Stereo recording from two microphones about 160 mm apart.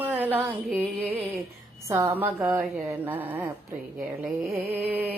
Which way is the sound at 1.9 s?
15° right (ahead or behind).